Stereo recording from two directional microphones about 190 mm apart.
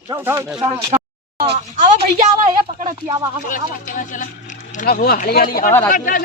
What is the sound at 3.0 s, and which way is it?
Speech, 20° right (ahead or behind).